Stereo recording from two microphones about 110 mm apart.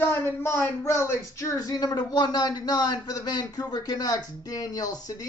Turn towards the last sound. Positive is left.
turn(degrees=35)  # may be behind; listen again after turning